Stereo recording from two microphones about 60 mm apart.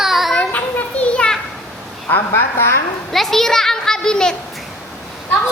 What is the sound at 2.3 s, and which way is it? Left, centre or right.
Speech, left.